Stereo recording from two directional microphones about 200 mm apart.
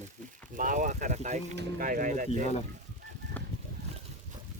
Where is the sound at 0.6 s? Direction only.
40° right (ahead or behind).